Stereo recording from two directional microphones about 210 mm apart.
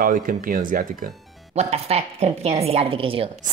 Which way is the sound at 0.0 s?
40° right (ahead or behind).